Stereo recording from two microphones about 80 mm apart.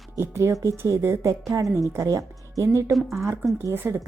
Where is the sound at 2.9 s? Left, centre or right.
Centre.